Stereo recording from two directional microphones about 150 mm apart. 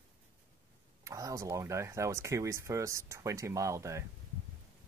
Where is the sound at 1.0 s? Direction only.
20° right (ahead or behind).